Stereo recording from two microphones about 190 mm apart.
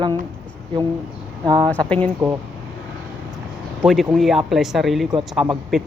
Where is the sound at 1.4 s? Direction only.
25° right (ahead or behind).